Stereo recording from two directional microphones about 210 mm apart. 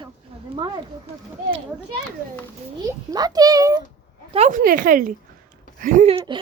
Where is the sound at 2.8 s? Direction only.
20° right (ahead or behind).